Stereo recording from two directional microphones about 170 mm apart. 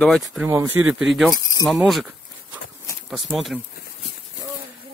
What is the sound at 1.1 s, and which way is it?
Speech, centre (ahead or behind).